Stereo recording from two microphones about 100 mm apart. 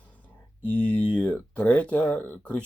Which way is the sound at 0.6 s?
15° left (ahead or behind).